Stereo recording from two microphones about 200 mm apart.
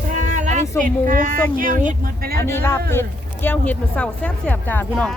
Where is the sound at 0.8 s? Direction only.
45° right (ahead or behind).